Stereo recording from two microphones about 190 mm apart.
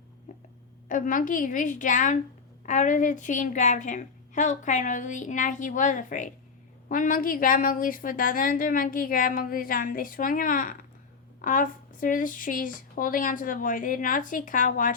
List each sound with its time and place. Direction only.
0.9 s a woman's voice: 45° left (ahead or behind)